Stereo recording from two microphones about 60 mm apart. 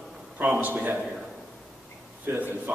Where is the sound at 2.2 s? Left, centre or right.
Right.